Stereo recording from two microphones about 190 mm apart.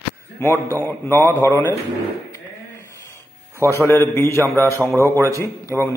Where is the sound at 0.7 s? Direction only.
10° left (ahead or behind).